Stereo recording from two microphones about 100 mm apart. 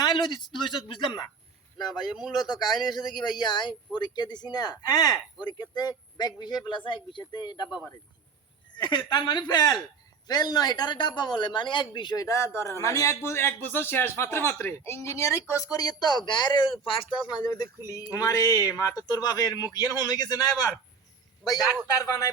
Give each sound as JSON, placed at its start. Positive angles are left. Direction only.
{"t": 0.0, "sound": "speech", "side_deg": 50}
{"t": 1.9, "sound": "speech", "side_deg": -5}
{"t": 2.4, "sound": "speech", "side_deg": 45}
{"t": 8.7, "sound": "a woman's voice", "side_deg": 50}
{"t": 12.2, "sound": "a man's voice", "side_deg": 30}
{"t": 16.8, "sound": "speech", "side_deg": 60}
{"t": 17.4, "sound": "speech", "side_deg": 40}